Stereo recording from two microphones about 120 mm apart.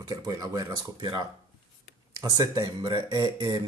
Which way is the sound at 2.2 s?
30° right (ahead or behind).